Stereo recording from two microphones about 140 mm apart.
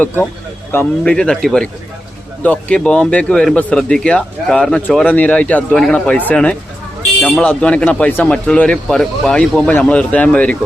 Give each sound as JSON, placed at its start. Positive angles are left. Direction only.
{"t": 0.7, "sound": "speech", "side_deg": 15}
{"t": 1.1, "sound": "speech", "side_deg": 5}